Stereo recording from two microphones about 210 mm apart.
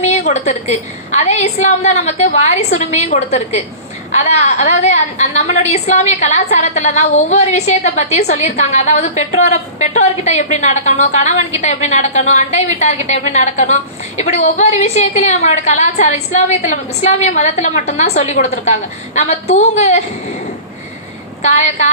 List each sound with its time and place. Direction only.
0.0 s a woman's voice: 35° left (ahead or behind)
21.4 s a woman's voice: 35° left (ahead or behind)